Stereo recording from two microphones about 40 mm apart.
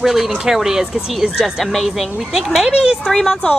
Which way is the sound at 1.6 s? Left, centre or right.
Centre.